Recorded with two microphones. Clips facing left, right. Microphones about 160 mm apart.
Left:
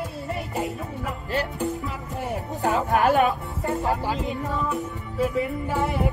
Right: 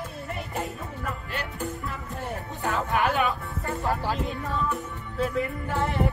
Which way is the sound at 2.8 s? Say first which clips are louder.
Left 5 dB; 40° left (ahead or behind).